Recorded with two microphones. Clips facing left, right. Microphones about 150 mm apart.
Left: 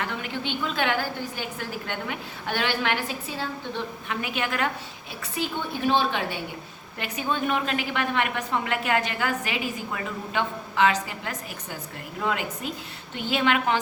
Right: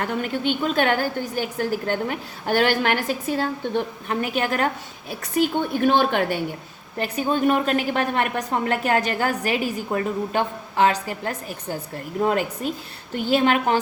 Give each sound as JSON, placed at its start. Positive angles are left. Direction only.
{"t": 0.0, "sound": "a woman's voice", "side_deg": -45}
{"t": 5.2, "sound": "a woman's voice", "side_deg": -55}
{"t": 7.0, "sound": "a woman's voice", "side_deg": -40}